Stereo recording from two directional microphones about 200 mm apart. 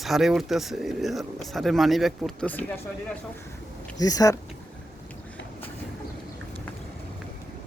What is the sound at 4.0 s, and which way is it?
Speech, 20° left (ahead or behind).